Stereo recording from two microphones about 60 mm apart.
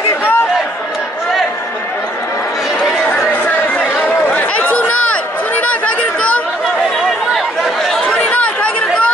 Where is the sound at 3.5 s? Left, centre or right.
Left.